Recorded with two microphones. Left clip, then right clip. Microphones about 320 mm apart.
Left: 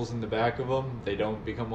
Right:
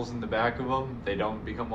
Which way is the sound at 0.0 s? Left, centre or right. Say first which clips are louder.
Even; centre.